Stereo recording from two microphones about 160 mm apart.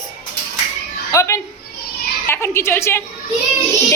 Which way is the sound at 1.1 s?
20° left (ahead or behind).